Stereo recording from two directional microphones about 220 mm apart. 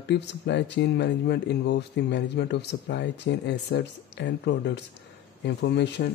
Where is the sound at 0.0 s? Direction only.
50° left (ahead or behind).